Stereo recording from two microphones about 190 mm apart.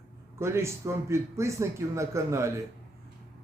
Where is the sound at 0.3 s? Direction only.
15° right (ahead or behind).